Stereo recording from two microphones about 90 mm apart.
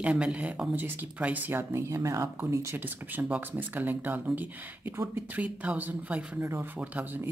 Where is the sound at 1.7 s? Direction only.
35° right (ahead or behind).